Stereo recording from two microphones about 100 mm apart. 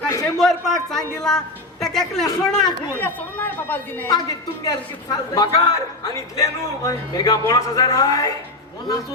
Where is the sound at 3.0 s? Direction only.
20° left (ahead or behind).